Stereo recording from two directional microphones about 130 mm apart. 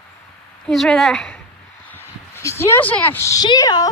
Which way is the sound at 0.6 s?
5° left (ahead or behind).